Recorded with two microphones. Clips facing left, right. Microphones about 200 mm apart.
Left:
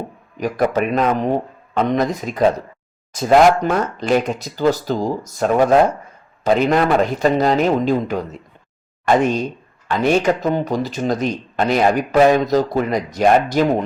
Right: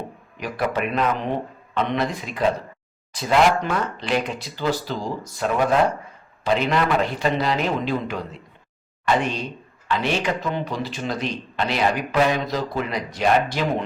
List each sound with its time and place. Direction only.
0.3 s a man's voice: 45° left (ahead or behind)